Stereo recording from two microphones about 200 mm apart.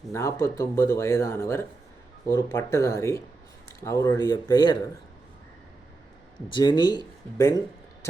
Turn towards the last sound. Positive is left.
turn(degrees=15)  # may be behind; listen again after turning